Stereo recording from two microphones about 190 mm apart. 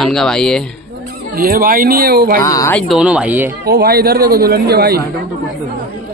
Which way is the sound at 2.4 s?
15° left (ahead or behind).